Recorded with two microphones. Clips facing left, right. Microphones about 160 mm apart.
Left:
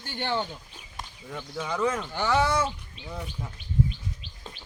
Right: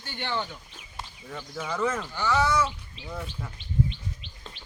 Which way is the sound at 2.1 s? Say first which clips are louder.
Even; 55° left (ahead or behind).